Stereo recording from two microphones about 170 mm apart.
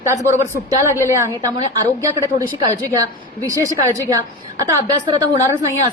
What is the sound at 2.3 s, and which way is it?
Speech, 45° left (ahead or behind).